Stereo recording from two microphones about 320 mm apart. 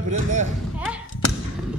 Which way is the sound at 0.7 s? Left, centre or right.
Centre.